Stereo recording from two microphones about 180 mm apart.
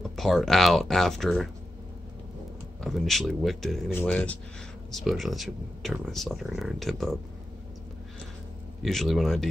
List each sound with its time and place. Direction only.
0.1 s speech: centre (ahead or behind)
2.8 s speech: centre (ahead or behind)
8.8 s speech: centre (ahead or behind)